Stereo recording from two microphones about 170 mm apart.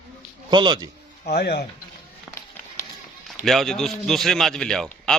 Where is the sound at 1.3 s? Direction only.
70° left (ahead or behind).